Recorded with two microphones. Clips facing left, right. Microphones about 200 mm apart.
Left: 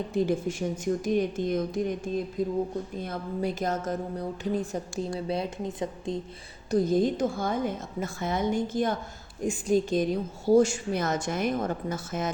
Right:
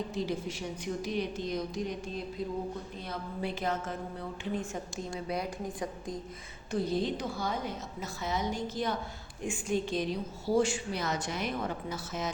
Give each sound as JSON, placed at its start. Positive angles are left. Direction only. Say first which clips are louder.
{"t": 0.1, "sound": "a woman's voice", "louder": "left 7 dB", "side_deg": 50}
{"t": 5.3, "sound": "a woman's voice", "louder": "left 4 dB", "side_deg": 25}
{"t": 6.7, "sound": "a woman's voice", "louder": "left 7 dB", "side_deg": 45}
{"t": 9.4, "sound": "a woman's voice", "louder": "left 7 dB", "side_deg": 40}